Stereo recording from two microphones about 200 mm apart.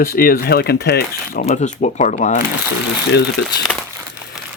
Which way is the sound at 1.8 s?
35° left (ahead or behind).